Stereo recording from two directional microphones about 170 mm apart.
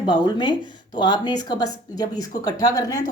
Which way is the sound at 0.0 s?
25° left (ahead or behind).